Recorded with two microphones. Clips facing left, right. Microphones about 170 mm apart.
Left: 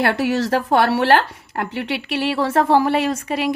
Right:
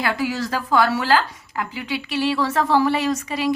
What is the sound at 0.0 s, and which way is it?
A woman's voice, 65° left (ahead or behind).